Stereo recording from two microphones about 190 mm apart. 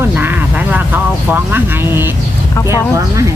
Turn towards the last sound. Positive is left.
turn(degrees=-15)  # may be behind; listen again after turning